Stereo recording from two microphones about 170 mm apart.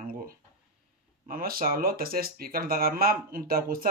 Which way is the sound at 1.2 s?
60° right (ahead or behind).